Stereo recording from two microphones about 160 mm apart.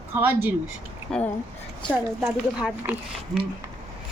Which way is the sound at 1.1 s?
5° left (ahead or behind).